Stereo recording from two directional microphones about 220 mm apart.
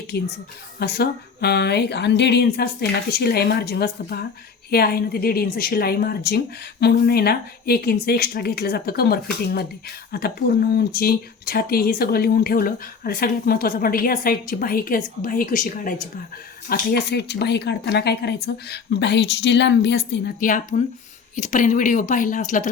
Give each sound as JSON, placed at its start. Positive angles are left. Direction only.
{"t": 0.1, "sound": "speech", "side_deg": 45}
{"t": 20.4, "sound": "speech", "side_deg": 35}